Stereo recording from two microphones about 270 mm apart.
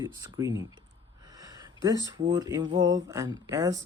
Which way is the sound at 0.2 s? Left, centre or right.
Centre.